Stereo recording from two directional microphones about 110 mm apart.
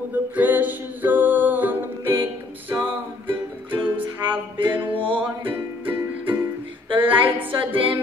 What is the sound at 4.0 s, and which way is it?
Music, 50° right (ahead or behind).